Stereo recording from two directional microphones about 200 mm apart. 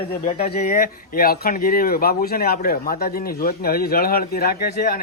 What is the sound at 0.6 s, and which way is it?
Speech, 40° left (ahead or behind).